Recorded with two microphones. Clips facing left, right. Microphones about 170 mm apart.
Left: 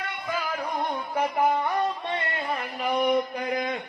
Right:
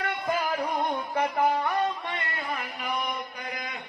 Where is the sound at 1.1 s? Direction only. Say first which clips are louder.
Left 2 dB; 15° left (ahead or behind).